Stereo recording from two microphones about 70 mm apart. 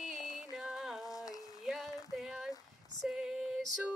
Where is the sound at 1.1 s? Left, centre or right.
Left.